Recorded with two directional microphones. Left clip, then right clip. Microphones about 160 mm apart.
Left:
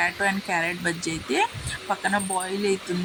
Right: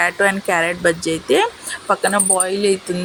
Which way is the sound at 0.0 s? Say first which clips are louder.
Right 8 dB; 15° right (ahead or behind).